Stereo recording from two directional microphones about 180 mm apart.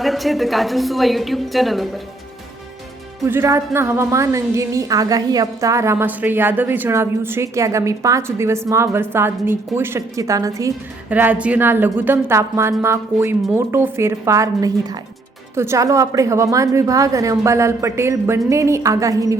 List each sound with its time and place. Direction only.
0.0 s a woman's voice: centre (ahead or behind)
3.2 s a woman's voice: 15° right (ahead or behind)